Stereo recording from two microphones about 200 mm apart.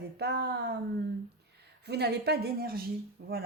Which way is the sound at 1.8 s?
55° right (ahead or behind).